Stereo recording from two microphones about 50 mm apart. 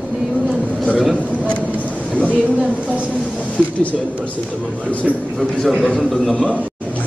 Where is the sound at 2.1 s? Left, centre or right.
Left.